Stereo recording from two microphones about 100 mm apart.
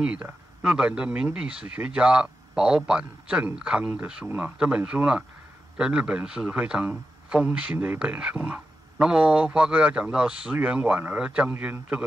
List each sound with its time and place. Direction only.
0.0 s speech: 10° right (ahead or behind)
11.5 s a man's voice: 20° right (ahead or behind)